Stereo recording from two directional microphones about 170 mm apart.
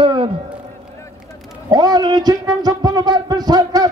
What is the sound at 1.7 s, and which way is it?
Speech, 25° right (ahead or behind).